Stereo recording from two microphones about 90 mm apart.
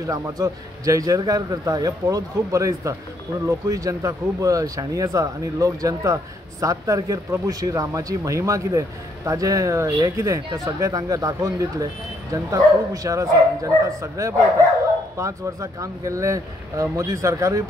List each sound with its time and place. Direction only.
0.0 s speech: 40° right (ahead or behind)